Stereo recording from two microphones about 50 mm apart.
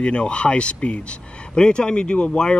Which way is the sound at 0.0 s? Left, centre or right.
Left.